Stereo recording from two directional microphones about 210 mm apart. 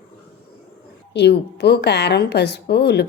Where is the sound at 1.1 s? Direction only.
55° left (ahead or behind).